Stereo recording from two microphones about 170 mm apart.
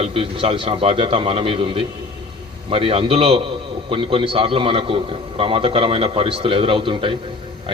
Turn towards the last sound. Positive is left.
turn(degrees=-30)  # may be behind; listen again after turning